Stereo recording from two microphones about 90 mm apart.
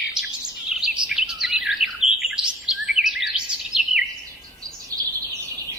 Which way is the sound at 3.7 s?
5° right (ahead or behind).